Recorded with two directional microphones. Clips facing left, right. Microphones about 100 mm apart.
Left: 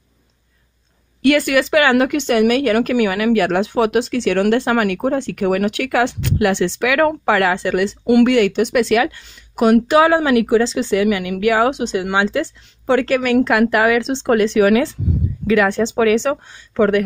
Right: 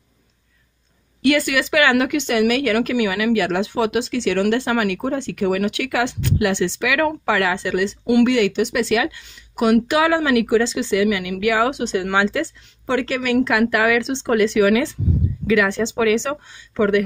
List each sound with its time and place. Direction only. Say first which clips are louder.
1.2 s speech: left 3 dB; 50° left (ahead or behind)
11.7 s speech: left 1 dB; 20° left (ahead or behind)
12.8 s speech: left 5 dB; 50° left (ahead or behind)
13.7 s speech: left 3 dB; 35° left (ahead or behind)